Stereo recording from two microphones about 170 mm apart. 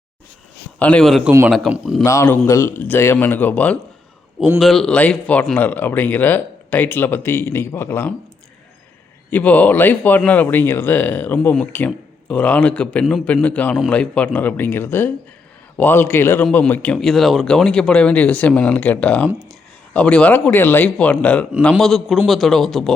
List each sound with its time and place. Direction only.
0.8 s a man's voice: 5° left (ahead or behind)
2.0 s a man's voice: 15° left (ahead or behind)
4.4 s a man's voice: centre (ahead or behind)
9.3 s a man's voice: 10° left (ahead or behind)